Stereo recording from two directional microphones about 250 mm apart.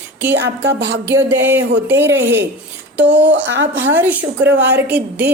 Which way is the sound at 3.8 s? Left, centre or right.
Centre.